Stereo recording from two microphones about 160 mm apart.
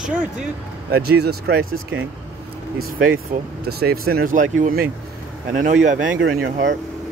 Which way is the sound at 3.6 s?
75° right (ahead or behind).